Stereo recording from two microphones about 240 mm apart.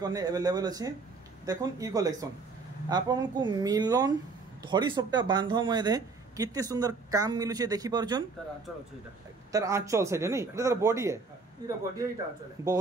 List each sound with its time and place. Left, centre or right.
0.0 s speech: centre
9.5 s speech: centre